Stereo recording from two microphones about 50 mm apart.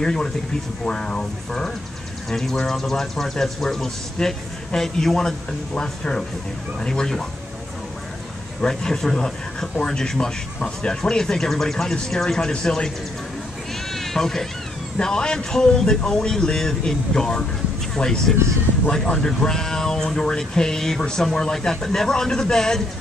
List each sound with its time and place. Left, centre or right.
0.0 s speech: centre
8.5 s speech: centre
13.9 s speech: centre